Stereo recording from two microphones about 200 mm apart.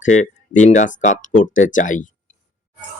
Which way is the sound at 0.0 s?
35° left (ahead or behind).